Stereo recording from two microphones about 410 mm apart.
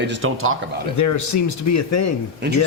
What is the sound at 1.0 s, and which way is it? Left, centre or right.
Speech, left.